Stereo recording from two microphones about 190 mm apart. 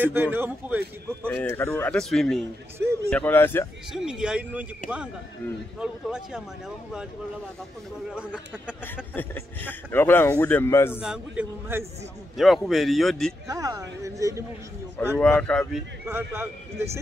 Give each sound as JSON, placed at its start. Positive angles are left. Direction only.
{"t": 0.0, "sound": "a man's voice", "side_deg": -10}
{"t": 1.2, "sound": "a man's voice", "side_deg": 5}
{"t": 3.9, "sound": "speech", "side_deg": -5}
{"t": 8.1, "sound": "speech", "side_deg": -5}
{"t": 8.8, "sound": "a man's voice", "side_deg": 10}
{"t": 10.9, "sound": "speech", "side_deg": -5}
{"t": 13.5, "sound": "a man's voice", "side_deg": -20}
{"t": 15.1, "sound": "speech", "side_deg": 5}
{"t": 16.1, "sound": "a man's voice", "side_deg": -10}